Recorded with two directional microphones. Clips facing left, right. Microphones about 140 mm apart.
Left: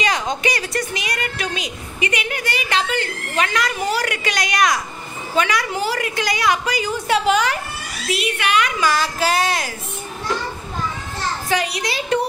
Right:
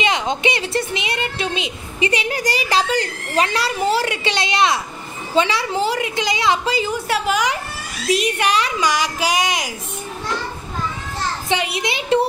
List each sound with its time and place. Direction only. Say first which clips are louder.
0.0 s a woman's voice: right 2 dB; 25° right (ahead or behind)
7.1 s a woman's voice: left 5 dB; 5° right (ahead or behind)
8.1 s a woman's voice: right 3 dB; 40° right (ahead or behind)
8.7 s speech: even; 15° right (ahead or behind)
11.4 s a woman's voice: even; 25° right (ahead or behind)